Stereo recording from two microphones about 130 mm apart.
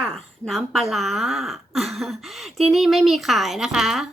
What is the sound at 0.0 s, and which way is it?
Speech, centre (ahead or behind).